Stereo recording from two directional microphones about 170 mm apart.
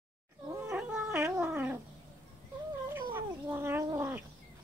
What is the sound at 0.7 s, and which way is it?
Cat, 10° right (ahead or behind).